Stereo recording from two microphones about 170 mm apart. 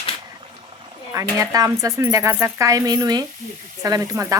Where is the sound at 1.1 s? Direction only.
20° right (ahead or behind).